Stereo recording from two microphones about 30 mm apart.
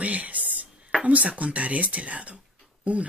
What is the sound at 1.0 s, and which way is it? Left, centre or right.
Speech, right.